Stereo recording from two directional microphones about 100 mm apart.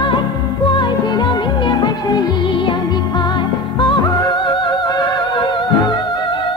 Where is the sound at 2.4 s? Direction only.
55° left (ahead or behind).